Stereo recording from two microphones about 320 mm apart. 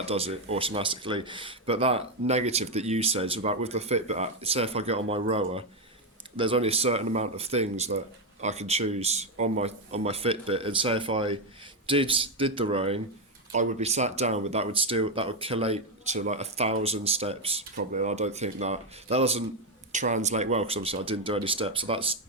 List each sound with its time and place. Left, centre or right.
0.0 s speech: centre